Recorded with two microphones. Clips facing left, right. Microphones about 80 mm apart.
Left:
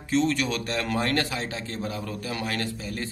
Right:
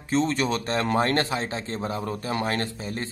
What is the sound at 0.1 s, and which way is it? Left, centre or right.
A man's voice, right.